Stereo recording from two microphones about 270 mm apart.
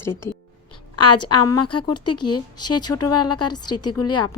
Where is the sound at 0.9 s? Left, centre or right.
Left.